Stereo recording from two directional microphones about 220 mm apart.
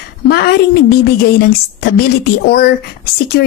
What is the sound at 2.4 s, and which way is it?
Speech, 45° left (ahead or behind).